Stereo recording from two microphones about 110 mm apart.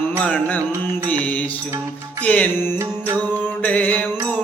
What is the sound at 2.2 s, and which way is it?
Music, 15° left (ahead or behind).